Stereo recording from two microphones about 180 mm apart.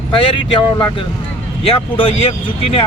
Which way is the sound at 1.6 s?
30° left (ahead or behind).